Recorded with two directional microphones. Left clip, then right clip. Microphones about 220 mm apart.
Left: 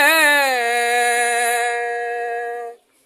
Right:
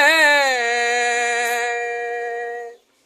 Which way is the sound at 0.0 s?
20° left (ahead or behind).